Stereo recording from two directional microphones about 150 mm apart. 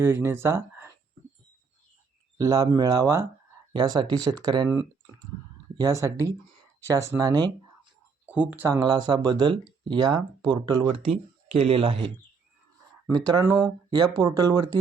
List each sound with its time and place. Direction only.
0.0 s speech: 15° right (ahead or behind)
2.4 s speech: 25° right (ahead or behind)
5.7 s speech: 25° right (ahead or behind)
8.3 s speech: 10° right (ahead or behind)
8.8 s speech: 30° right (ahead or behind)
13.1 s speech: 25° right (ahead or behind)
13.9 s speech: 30° right (ahead or behind)